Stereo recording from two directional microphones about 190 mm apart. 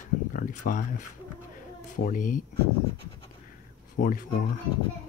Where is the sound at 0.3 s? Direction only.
45° left (ahead or behind).